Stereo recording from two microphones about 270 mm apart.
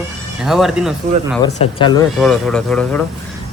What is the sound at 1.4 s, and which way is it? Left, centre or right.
Speech, centre.